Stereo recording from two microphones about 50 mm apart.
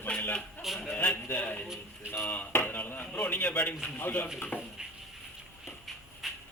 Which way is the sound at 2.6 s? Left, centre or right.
Left.